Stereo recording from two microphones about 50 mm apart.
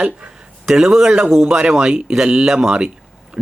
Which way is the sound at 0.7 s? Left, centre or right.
Centre.